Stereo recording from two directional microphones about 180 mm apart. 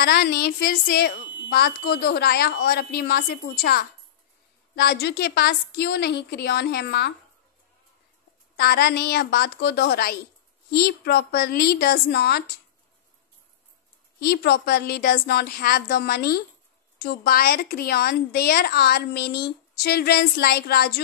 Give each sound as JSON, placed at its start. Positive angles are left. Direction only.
{"t": 0.0, "sound": "a woman's voice", "side_deg": 60}
{"t": 8.5, "sound": "a woman's voice", "side_deg": 60}
{"t": 14.2, "sound": "a woman's voice", "side_deg": 60}